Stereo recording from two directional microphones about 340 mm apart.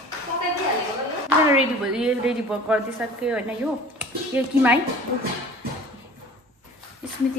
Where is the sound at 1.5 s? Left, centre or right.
Centre.